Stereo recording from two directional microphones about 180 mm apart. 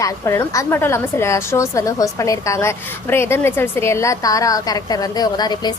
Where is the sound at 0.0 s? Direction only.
15° left (ahead or behind).